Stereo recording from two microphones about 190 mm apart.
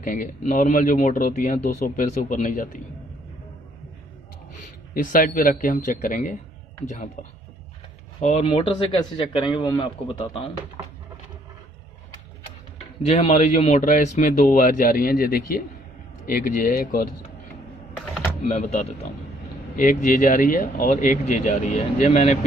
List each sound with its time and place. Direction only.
0.0 s speech: 45° left (ahead or behind)
4.9 s speech: 45° left (ahead or behind)
8.2 s speech: 40° left (ahead or behind)
8.5 s a man's voice: 25° left (ahead or behind)
13.0 s speech: 35° left (ahead or behind)
18.4 s speech: 35° left (ahead or behind)